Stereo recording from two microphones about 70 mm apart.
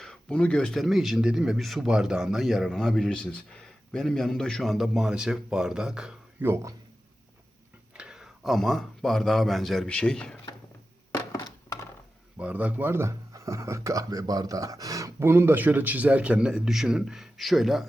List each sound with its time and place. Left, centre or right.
0.0 s a sound: centre
0.7 s a man's voice: centre
6.4 s speech: right
7.9 s a sound: centre
8.5 s a man's voice: centre
9.8 s speech: centre
12.4 s speech: right
13.3 s speech: right
15.2 s a man's voice: right; by 17.8 s centre